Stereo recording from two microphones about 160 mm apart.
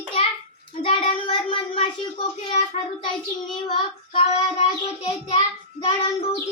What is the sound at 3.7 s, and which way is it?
Child singing, 40° left (ahead or behind).